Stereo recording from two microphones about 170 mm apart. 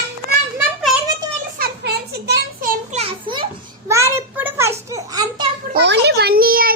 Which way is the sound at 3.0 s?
30° right (ahead or behind).